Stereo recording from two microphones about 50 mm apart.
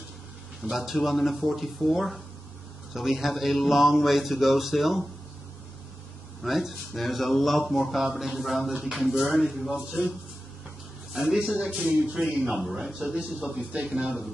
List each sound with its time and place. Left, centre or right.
0.6 s speech: centre
6.4 s speech: centre
11.1 s speech: centre
12.9 s a man's voice: centre
13.6 s a man's voice: right